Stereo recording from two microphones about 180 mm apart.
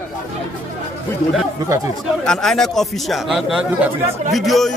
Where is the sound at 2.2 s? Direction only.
Centre (ahead or behind).